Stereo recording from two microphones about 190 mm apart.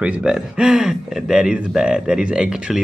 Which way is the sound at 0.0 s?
5° right (ahead or behind).